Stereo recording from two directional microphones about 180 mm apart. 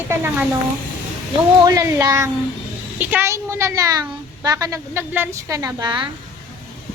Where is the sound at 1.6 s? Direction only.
20° right (ahead or behind).